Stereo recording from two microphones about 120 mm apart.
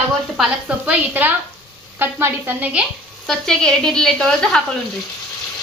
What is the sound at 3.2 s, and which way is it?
A woman's voice, 5° left (ahead or behind).